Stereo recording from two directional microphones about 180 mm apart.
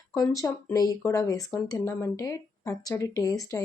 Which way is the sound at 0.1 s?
20° left (ahead or behind).